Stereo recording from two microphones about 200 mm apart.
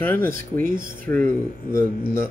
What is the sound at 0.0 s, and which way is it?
Speech, 10° left (ahead or behind).